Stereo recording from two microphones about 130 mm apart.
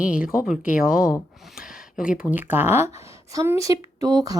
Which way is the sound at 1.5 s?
5° right (ahead or behind).